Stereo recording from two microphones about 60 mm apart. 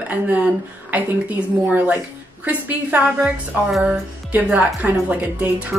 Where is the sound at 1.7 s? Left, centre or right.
Right.